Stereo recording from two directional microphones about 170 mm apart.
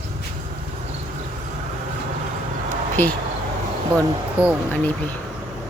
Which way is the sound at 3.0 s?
10° left (ahead or behind).